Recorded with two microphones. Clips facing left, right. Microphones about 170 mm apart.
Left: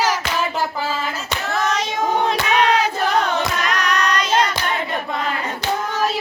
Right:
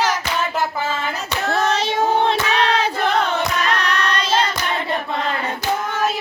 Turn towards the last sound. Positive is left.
turn(degrees=-30)  # may be behind; listen again after turning